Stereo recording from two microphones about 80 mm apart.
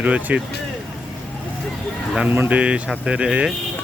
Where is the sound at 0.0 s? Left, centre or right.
Centre.